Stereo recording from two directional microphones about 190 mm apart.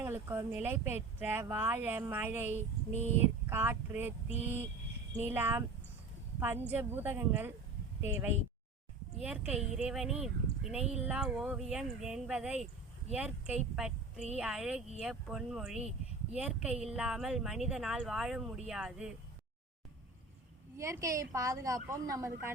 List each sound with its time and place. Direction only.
0.0 s speech: 15° right (ahead or behind)
20.7 s speech: 15° right (ahead or behind)